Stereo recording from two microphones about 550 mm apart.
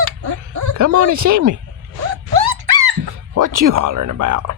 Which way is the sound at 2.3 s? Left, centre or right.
Right.